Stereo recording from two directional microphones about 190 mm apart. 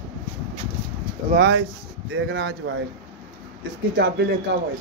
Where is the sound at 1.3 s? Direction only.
60° right (ahead or behind).